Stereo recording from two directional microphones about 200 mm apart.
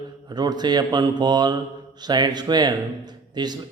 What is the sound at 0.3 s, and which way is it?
Speech, 20° right (ahead or behind).